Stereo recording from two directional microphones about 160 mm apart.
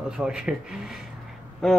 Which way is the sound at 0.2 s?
5° right (ahead or behind).